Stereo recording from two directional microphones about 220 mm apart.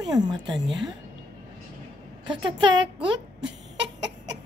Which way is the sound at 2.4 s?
20° right (ahead or behind).